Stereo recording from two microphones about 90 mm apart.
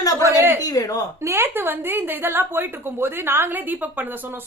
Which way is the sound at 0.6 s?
45° left (ahead or behind).